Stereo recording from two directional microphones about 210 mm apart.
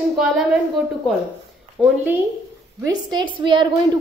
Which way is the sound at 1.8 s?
10° right (ahead or behind).